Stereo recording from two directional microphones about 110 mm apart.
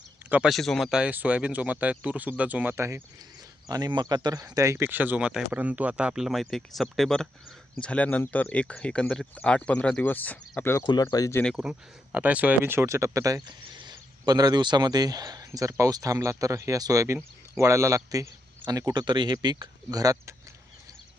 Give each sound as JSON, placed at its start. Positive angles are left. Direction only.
{"t": 0.4, "sound": "speech", "side_deg": 0}
{"t": 2.7, "sound": "speech", "side_deg": -25}
{"t": 3.7, "sound": "speech", "side_deg": -40}
{"t": 10.8, "sound": "speech", "side_deg": 40}
{"t": 11.5, "sound": "speech", "side_deg": -10}